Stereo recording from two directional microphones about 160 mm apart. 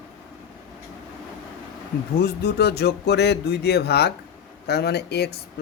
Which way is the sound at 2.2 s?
90° left.